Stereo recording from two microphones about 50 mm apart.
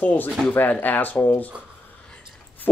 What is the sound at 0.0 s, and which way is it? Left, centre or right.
Speech, left.